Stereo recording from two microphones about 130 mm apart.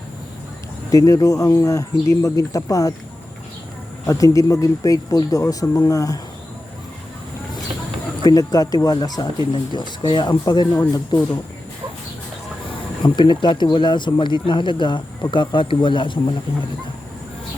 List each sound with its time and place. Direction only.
0.9 s speech: 25° left (ahead or behind)
4.0 s speech: 25° left (ahead or behind)
8.2 s speech: 30° left (ahead or behind)
13.0 s speech: 35° left (ahead or behind)